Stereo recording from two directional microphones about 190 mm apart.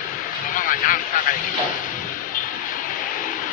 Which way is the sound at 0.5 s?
45° left (ahead or behind).